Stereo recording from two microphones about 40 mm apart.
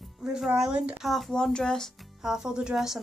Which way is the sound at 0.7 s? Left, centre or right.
Right.